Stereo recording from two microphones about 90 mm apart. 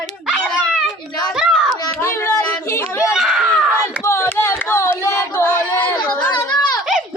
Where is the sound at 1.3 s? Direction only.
5° right (ahead or behind).